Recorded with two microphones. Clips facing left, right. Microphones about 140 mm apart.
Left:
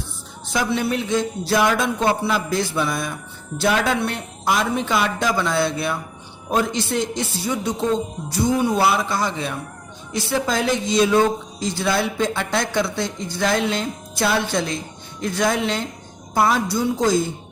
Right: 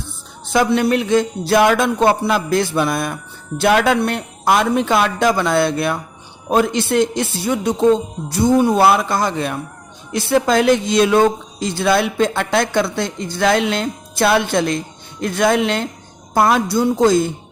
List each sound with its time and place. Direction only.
0.5 s speech: 60° right (ahead or behind)